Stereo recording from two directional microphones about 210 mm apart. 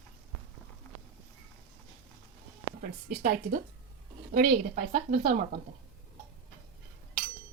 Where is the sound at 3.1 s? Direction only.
40° right (ahead or behind).